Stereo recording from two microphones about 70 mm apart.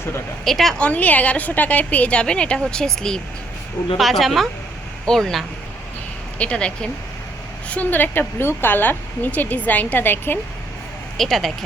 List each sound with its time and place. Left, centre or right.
0.4 s speech: centre
0.8 s a woman's voice: left; by 5.5 s centre
6.4 s a woman's voice: centre
11.2 s speech: centre